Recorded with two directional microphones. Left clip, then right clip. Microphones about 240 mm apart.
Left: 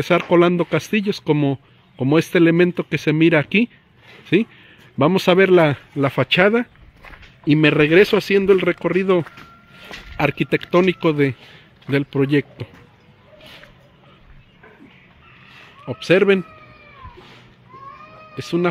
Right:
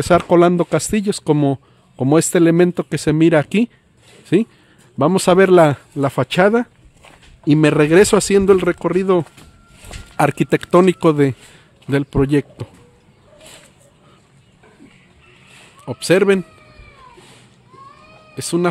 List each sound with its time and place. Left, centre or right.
0.1 s speech: centre
15.8 s speech: centre
18.3 s speech: right